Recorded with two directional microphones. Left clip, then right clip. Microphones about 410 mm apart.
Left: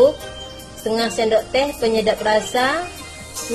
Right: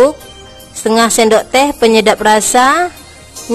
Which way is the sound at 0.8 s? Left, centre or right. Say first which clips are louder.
Right 10 dB; right.